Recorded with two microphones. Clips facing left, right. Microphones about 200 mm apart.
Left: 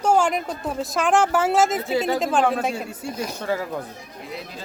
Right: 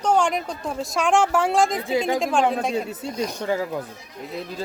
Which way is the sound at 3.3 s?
15° right (ahead or behind).